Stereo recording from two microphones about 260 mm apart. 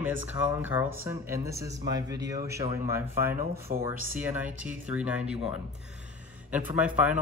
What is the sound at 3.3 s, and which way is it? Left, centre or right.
Speech, right.